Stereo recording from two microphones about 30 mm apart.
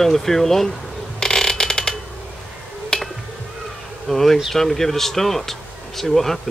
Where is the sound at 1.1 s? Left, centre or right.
Centre.